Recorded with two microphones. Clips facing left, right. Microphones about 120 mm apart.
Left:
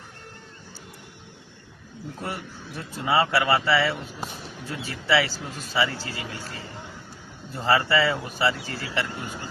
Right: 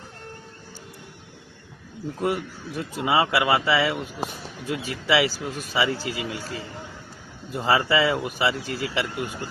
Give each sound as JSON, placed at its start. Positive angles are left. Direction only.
{"t": 2.2, "sound": "speech", "side_deg": -15}
{"t": 7.5, "sound": "speech", "side_deg": -15}